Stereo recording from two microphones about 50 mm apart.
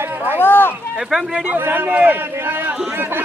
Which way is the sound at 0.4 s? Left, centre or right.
Left.